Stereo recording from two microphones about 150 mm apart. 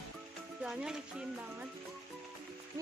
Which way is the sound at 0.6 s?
5° right (ahead or behind).